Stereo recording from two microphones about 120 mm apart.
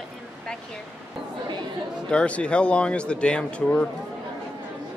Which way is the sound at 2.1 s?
10° left (ahead or behind).